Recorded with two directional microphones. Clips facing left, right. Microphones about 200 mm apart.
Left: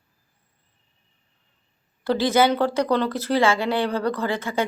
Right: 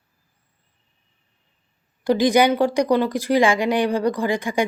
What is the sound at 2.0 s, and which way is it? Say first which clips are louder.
A woman's voice: right 3 dB; 15° right (ahead or behind).